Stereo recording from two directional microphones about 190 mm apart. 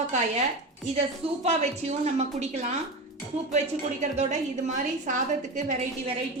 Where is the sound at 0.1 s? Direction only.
40° right (ahead or behind).